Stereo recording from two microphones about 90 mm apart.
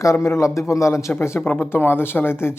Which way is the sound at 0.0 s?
35° left (ahead or behind).